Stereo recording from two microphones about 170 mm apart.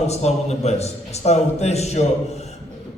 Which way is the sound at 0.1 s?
40° left (ahead or behind).